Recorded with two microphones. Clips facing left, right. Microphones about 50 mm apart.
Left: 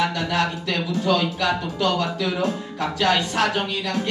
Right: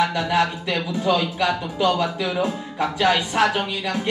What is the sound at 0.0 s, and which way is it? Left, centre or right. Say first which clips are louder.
Speech: right 2 dB; centre.